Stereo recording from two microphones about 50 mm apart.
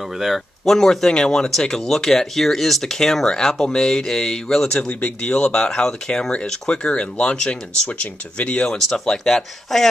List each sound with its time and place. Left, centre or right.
0.2 s speech: centre
4.7 s speech: left
5.4 s speech: centre
6.7 s speech: centre
8.7 s speech: centre